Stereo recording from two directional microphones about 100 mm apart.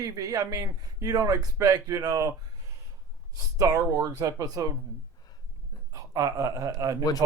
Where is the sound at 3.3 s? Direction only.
35° right (ahead or behind).